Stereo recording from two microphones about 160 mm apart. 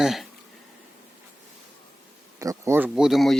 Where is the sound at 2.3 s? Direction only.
20° right (ahead or behind).